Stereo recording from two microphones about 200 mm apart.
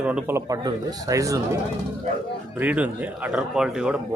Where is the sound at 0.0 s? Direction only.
5° right (ahead or behind).